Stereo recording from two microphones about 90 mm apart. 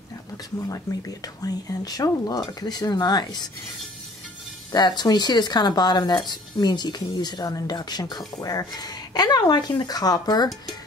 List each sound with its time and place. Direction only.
0.7 s speech: 40° left (ahead or behind)
4.7 s speech: 50° left (ahead or behind)